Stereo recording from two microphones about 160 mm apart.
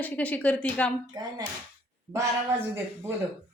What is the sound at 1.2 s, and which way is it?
Speech, 25° right (ahead or behind).